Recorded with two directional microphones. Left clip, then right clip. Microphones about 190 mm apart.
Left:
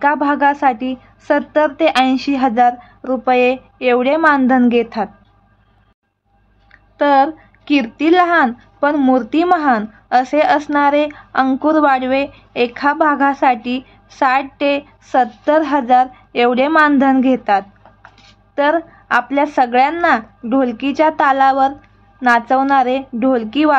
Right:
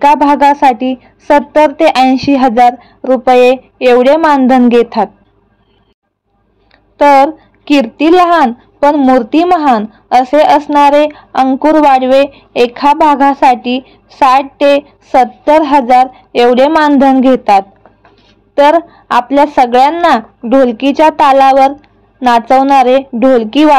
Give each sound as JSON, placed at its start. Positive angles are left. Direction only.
{"t": 0.0, "sound": "speech", "side_deg": -20}
{"t": 7.0, "sound": "speech", "side_deg": -15}